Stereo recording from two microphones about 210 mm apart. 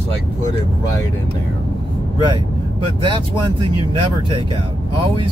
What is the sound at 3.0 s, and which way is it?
Speech, 20° right (ahead or behind).